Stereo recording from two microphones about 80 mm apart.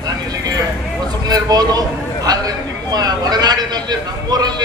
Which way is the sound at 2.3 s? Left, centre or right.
Right.